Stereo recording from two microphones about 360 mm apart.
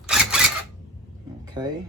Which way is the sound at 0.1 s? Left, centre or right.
Centre.